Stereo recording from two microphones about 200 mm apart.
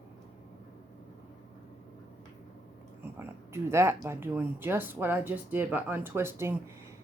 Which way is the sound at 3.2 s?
15° right (ahead or behind).